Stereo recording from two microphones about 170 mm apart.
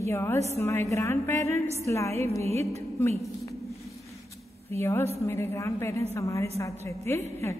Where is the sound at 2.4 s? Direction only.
40° right (ahead or behind).